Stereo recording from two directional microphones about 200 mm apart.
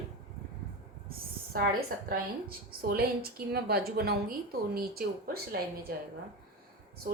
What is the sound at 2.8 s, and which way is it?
A woman's voice, 50° right (ahead or behind).